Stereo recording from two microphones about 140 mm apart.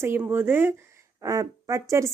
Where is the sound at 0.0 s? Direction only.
15° right (ahead or behind).